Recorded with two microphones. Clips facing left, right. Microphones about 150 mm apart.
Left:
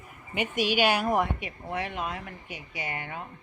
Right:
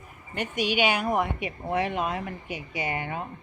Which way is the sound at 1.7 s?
15° right (ahead or behind).